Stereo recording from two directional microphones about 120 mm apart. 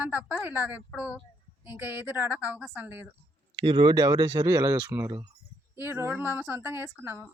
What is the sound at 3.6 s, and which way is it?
A woman's voice, 40° right (ahead or behind).